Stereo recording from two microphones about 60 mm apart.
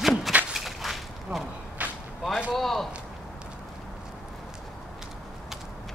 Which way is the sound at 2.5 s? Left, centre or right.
Centre.